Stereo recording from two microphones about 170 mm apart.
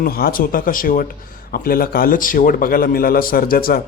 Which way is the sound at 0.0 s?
60° left (ahead or behind).